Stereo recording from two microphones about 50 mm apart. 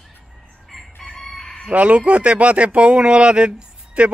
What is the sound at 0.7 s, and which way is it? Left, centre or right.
Chicken, centre.